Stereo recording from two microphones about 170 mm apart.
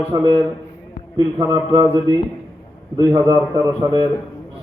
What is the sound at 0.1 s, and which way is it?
Speech, 25° right (ahead or behind).